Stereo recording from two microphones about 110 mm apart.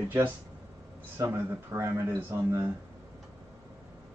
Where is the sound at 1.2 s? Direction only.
25° right (ahead or behind).